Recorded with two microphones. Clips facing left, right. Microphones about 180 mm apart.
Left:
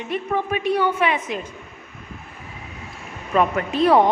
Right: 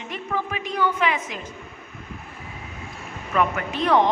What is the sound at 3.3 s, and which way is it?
Speech, 25° left (ahead or behind).